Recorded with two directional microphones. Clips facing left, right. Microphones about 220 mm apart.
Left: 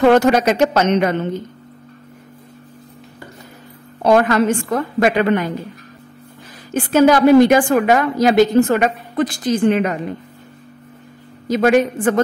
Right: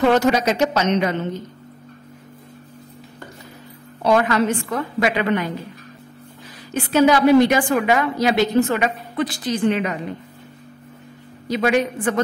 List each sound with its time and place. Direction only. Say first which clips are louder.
0.1 s a woman's voice: left 4 dB; 55° left (ahead or behind)
4.0 s a woman's voice: left 4 dB; 45° left (ahead or behind)
6.7 s a woman's voice: left 3 dB; 50° left (ahead or behind)
11.4 s a woman's voice: left 5 dB; 45° left (ahead or behind)